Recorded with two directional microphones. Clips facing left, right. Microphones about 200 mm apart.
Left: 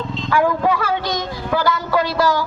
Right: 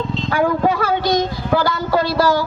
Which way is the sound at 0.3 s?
40° right (ahead or behind).